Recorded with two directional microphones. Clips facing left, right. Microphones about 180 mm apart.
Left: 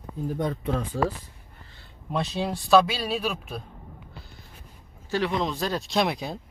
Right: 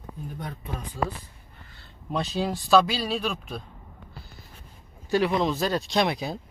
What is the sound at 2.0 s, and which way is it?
Speech, centre (ahead or behind).